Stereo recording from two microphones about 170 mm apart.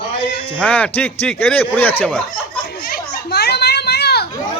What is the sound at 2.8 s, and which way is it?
Children playing, 65° left (ahead or behind).